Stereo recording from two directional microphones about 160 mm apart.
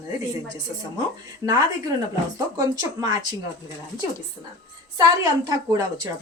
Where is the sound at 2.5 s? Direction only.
25° right (ahead or behind).